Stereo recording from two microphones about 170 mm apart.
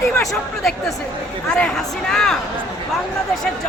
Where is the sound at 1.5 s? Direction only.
5° left (ahead or behind).